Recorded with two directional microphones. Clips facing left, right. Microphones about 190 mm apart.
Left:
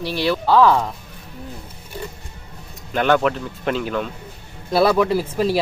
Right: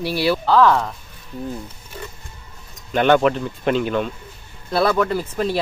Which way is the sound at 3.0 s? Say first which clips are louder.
Right 2 dB; centre (ahead or behind).